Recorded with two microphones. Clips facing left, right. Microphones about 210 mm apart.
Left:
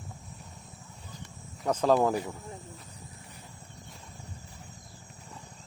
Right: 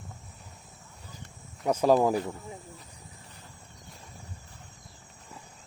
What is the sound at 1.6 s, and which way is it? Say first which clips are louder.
Speech: right 2 dB; 10° right (ahead or behind).